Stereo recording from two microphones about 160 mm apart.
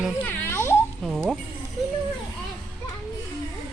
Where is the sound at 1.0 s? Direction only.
Centre (ahead or behind).